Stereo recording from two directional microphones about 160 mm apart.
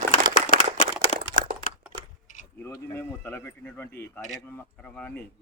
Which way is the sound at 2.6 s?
15° left (ahead or behind).